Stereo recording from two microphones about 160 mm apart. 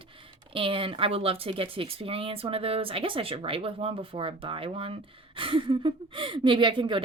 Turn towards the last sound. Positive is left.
turn(degrees=-30)  # may be behind; listen again after turning